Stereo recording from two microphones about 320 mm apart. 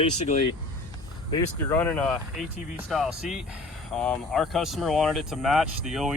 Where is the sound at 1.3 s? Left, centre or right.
Centre.